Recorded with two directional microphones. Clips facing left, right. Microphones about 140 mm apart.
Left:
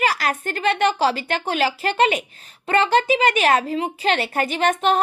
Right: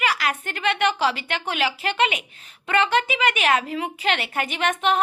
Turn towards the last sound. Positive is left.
turn(degrees=40)  # may be behind; listen again after turning